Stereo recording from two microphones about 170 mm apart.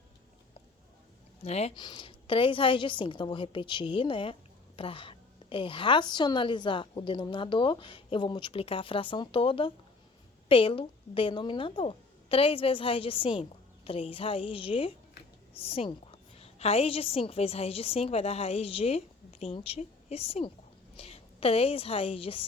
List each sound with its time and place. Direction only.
1.5 s speech: 40° left (ahead or behind)
1.7 s a woman's voice: 25° left (ahead or behind)